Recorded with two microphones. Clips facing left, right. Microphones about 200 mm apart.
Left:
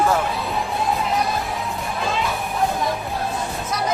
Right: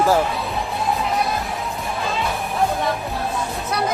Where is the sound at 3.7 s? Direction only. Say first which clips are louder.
Right 3 dB; 65° right (ahead or behind).